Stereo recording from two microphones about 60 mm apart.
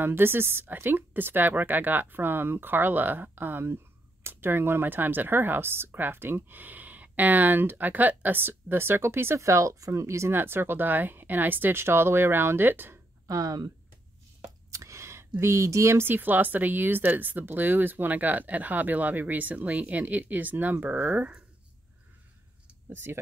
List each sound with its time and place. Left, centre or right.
0.0 s speech: right
10.3 s speech: right
13.3 s speech: right
14.7 s a sound: right
16.1 s speech: right
22.8 s speech: right